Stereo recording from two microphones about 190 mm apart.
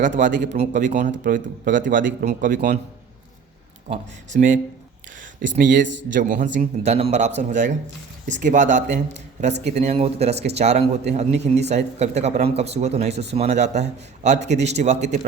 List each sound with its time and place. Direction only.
0.2 s speech: 40° right (ahead or behind)
3.8 s speech: 35° right (ahead or behind)
5.4 s speech: 75° right (ahead or behind)
6.1 s speech: 45° right (ahead or behind)